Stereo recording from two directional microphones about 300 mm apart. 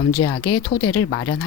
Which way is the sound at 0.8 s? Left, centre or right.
Left.